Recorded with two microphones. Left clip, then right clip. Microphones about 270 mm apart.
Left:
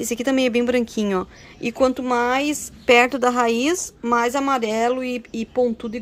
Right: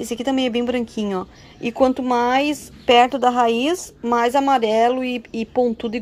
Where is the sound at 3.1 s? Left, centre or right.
Left.